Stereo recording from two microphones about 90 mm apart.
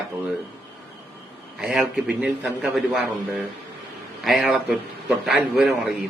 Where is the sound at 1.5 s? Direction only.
5° right (ahead or behind).